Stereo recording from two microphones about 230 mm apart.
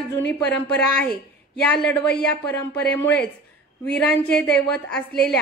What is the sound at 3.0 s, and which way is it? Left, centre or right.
Speech, left.